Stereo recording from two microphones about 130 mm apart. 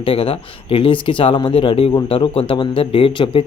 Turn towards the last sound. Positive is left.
turn(degrees=45)  # may be behind; listen again after turning